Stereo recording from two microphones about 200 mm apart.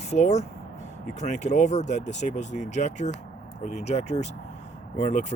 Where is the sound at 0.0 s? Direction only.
35° left (ahead or behind).